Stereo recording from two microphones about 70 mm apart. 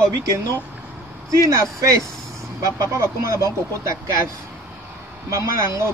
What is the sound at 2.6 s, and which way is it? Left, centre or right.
Speech, right.